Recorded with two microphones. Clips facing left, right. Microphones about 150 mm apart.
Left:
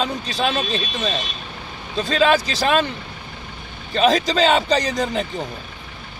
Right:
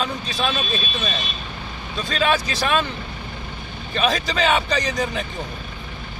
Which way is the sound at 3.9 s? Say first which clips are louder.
Left 5 dB; 35° left (ahead or behind).